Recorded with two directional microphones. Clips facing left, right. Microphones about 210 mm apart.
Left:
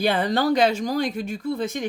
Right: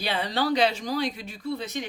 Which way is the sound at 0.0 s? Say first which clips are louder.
Left 6 dB; 50° left (ahead or behind).